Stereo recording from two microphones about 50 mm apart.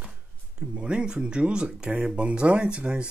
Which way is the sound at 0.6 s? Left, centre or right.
Right.